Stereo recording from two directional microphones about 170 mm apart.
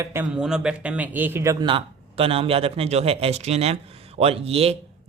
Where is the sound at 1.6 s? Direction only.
30° right (ahead or behind).